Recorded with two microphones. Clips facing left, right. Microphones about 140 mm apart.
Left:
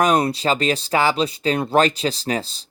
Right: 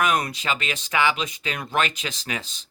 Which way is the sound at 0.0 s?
35° left (ahead or behind).